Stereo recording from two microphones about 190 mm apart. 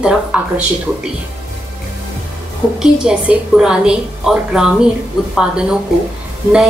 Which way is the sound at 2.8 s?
5° right (ahead or behind).